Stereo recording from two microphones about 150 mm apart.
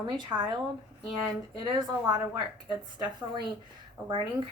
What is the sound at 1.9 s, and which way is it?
Speech, 25° right (ahead or behind).